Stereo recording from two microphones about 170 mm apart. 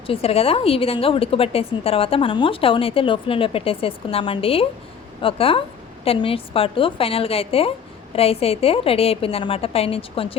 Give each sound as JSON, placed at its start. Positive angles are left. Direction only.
{"t": 0.1, "sound": "a woman's voice", "side_deg": 35}